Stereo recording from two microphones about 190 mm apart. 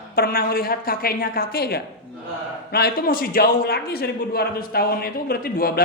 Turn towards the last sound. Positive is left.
turn(degrees=50)  # may be behind; listen again after turning